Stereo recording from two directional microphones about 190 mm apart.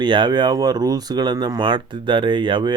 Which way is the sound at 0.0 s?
25° right (ahead or behind).